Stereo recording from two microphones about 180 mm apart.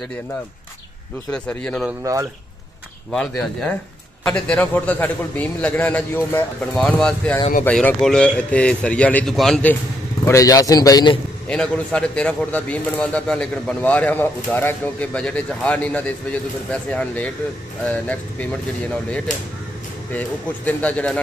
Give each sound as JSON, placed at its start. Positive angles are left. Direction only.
{"t": 1.3, "sound": "speech", "side_deg": 5}
{"t": 3.1, "sound": "a man's voice", "side_deg": 5}
{"t": 10.2, "sound": "a man's voice", "side_deg": 20}
{"t": 11.4, "sound": "a man's voice", "side_deg": 5}
{"t": 20.1, "sound": "a man's voice", "side_deg": 10}